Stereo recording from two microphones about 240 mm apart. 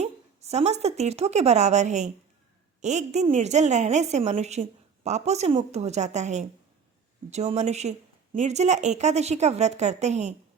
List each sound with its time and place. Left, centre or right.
0.0 s a woman's voice: right